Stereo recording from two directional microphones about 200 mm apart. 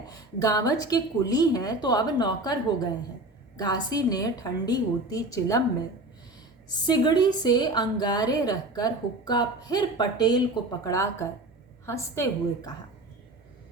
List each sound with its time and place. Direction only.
0.4 s a woman's voice: 20° left (ahead or behind)
6.8 s a woman's voice: 20° left (ahead or behind)